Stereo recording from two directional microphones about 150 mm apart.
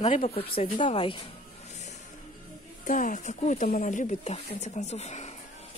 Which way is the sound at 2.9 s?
60° left (ahead or behind).